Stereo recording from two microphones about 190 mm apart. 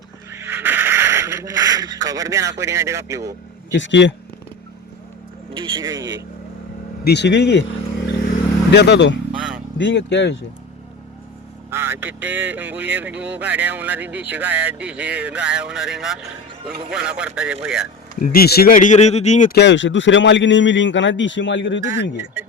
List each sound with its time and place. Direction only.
0.3 s a sound: 15° right (ahead or behind)
3.7 s a man's voice: 70° left (ahead or behind)
5.5 s speech: 25° right (ahead or behind)
7.0 s speech: 60° left (ahead or behind)
9.3 s vehicle: 5° right (ahead or behind)
9.7 s a man's voice: 70° left (ahead or behind)
11.7 s speech: 10° right (ahead or behind)
18.2 s speech: 50° left (ahead or behind)
19.5 s a man's voice: 65° left (ahead or behind)